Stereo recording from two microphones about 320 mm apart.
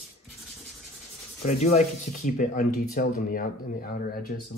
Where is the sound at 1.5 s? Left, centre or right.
Left.